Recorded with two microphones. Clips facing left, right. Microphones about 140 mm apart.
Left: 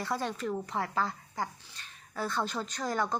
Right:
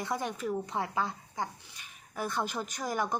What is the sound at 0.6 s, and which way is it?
A woman's voice, 20° right (ahead or behind).